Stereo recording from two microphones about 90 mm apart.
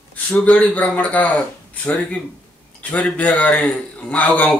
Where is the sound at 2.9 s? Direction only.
15° left (ahead or behind).